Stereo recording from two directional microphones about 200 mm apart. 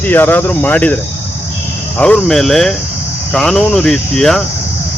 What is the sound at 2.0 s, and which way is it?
Cricket, 5° left (ahead or behind).